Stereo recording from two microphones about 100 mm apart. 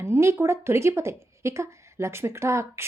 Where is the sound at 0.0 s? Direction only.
25° right (ahead or behind).